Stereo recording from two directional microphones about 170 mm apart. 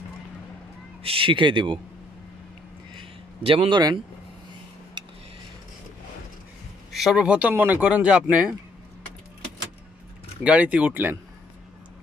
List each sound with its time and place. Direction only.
1.0 s speech: 30° right (ahead or behind)
3.0 s a sound: 30° right (ahead or behind)
6.9 s speech: centre (ahead or behind)
10.4 s speech: 5° right (ahead or behind)